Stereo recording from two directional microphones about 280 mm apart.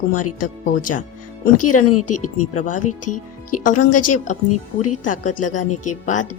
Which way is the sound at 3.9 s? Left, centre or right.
Left.